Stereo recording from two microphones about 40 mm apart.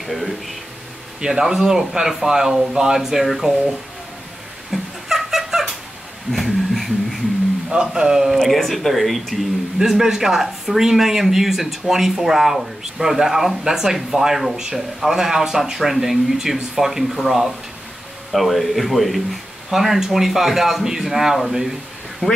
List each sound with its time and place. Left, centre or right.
0.0 s speech: centre
1.2 s speech: centre
4.6 s cat: centre
6.3 s a sound: centre
7.7 s speech: centre
8.4 s speech: centre
9.8 s speech: centre
22.2 s speech: left